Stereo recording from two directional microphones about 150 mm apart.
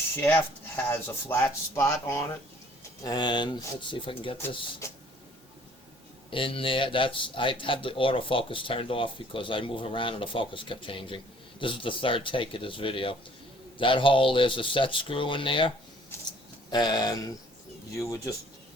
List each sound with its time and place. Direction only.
0.2 s speech: 15° left (ahead or behind); by 4.4 s 35° left (ahead or behind)
6.3 s speech: 35° left (ahead or behind)
16.7 s speech: 25° left (ahead or behind)